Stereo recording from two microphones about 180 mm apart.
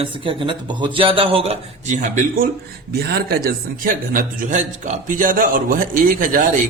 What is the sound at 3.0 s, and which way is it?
Speech, 60° right (ahead or behind).